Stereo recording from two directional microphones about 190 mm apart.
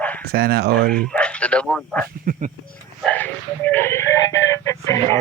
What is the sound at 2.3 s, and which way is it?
Speech, 40° right (ahead or behind).